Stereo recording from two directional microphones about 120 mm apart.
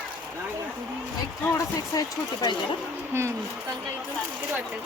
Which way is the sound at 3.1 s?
20° right (ahead or behind).